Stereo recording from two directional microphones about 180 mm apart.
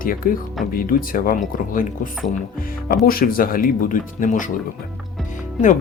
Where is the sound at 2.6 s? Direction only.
55° left (ahead or behind).